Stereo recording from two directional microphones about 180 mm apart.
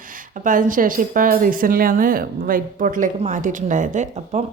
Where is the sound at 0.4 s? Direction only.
45° right (ahead or behind).